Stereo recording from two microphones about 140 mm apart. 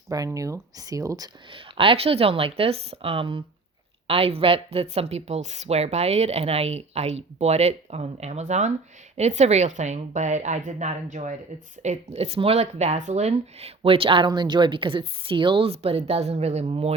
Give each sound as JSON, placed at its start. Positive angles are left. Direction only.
{"t": 0.3, "sound": "speech", "side_deg": -20}
{"t": 1.5, "sound": "a woman's voice", "side_deg": -40}